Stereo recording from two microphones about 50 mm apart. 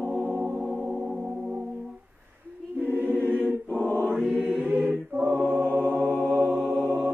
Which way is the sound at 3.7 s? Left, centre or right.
Left.